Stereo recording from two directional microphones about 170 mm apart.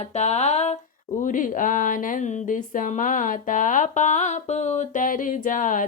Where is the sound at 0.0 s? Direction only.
40° left (ahead or behind).